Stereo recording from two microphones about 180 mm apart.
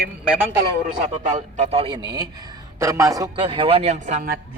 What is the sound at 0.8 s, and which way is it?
A man's voice, 45° right (ahead or behind).